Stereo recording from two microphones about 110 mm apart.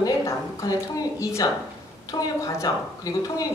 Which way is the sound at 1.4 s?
35° left (ahead or behind).